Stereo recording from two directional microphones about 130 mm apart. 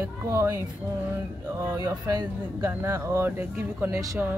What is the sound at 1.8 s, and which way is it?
Speech, 30° right (ahead or behind).